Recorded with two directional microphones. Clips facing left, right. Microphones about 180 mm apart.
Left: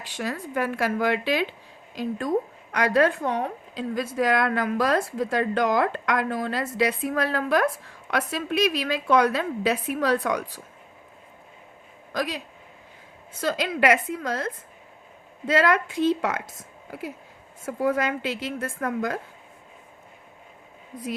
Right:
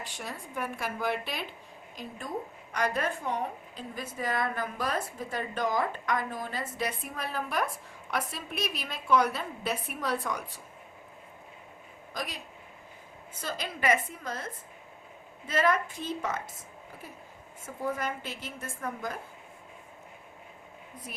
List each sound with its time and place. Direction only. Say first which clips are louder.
0.0 s a woman's voice: left 9 dB; 90° left
12.1 s speech: left 9 dB; 90° left
13.4 s a woman's voice: left 9 dB; 90° left
17.7 s a woman's voice: left 9 dB; 80° left